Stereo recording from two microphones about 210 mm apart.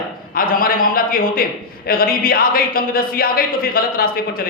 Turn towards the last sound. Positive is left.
turn(degrees=45)  # may be behind; listen again after turning